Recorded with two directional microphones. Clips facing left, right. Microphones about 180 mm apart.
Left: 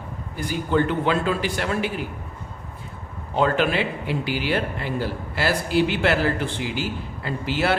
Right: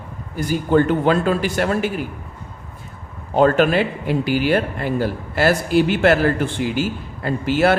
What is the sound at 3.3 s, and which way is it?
Speech, 45° right (ahead or behind).